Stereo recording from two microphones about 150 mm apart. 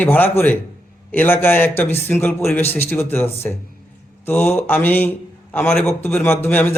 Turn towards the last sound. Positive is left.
turn(degrees=15)  # may be behind; listen again after turning